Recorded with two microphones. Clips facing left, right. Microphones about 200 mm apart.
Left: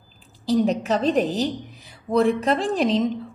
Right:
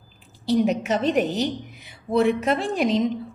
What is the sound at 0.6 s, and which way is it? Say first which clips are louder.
A woman's voice: left 1 dB; 35° left (ahead or behind).